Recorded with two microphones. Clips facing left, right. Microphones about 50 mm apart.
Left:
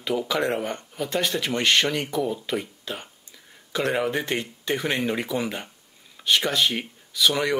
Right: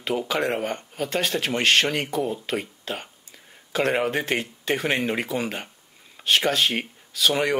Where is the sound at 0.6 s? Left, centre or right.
Right.